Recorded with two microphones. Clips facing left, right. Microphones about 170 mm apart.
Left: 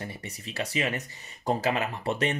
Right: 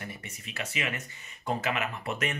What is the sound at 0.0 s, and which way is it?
Speech, 30° left (ahead or behind).